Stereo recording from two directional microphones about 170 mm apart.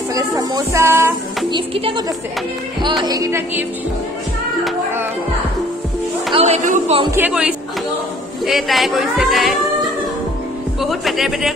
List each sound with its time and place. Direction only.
0.1 s speech: 20° right (ahead or behind)
1.5 s speech: 30° right (ahead or behind)
3.0 s music: 20° right (ahead or behind)
6.3 s speech: 40° right (ahead or behind)
7.1 s music: 10° right (ahead or behind)
8.5 s speech: centre (ahead or behind)
10.8 s speech: centre (ahead or behind)